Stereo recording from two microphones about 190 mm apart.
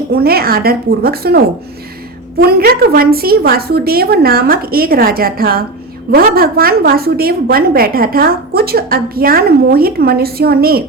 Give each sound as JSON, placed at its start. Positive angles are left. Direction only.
{"t": 0.1, "sound": "a woman's voice", "side_deg": -55}
{"t": 2.4, "sound": "a woman's voice", "side_deg": -55}